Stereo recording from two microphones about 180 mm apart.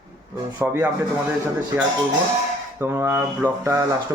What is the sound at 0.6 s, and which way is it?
Speech, 10° right (ahead or behind).